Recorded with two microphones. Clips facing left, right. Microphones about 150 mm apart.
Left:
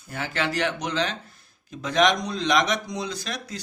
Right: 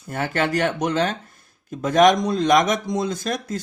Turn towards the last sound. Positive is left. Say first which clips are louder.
# right 7 dB
turn(degrees=-50)  # may be behind; listen again after turning